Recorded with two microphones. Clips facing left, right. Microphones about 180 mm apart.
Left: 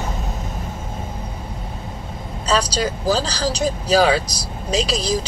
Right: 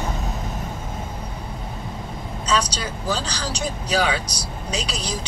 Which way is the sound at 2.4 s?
40° left (ahead or behind).